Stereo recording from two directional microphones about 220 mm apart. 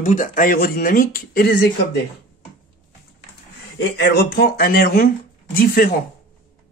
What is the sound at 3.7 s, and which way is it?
Speech, 50° left (ahead or behind).